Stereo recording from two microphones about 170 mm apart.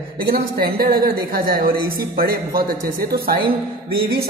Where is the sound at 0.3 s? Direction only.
60° right (ahead or behind).